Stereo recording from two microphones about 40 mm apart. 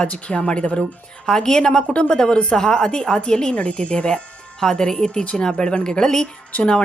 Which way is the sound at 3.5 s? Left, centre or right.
Left.